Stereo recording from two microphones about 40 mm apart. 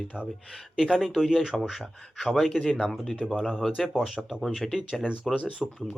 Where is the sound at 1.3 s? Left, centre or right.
Centre.